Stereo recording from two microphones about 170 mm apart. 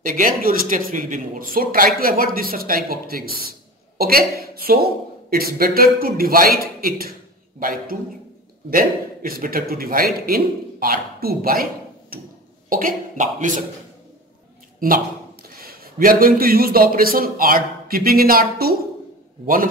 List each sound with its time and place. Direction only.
0.0 s a man's voice: 55° right (ahead or behind)
12.6 s speech: 55° right (ahead or behind)
14.8 s a man's voice: 60° right (ahead or behind)